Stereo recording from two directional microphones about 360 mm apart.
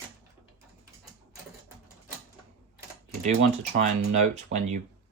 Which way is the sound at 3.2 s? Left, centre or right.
Centre.